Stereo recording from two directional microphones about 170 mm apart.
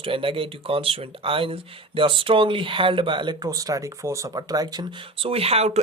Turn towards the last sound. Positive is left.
turn(degrees=-40)  # may be behind; listen again after turning